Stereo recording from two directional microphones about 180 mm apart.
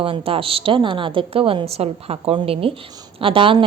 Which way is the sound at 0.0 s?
30° right (ahead or behind).